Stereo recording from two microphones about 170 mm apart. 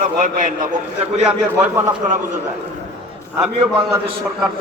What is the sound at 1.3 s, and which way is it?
Speech, 10° right (ahead or behind).